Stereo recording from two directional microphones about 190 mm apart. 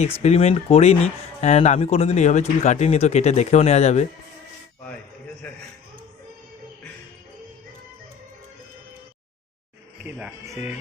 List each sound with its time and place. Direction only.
0.2 s speech: 35° left (ahead or behind)
10.0 s speech: 5° right (ahead or behind)